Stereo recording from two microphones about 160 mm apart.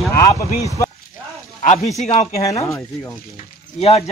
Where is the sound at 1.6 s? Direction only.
45° left (ahead or behind).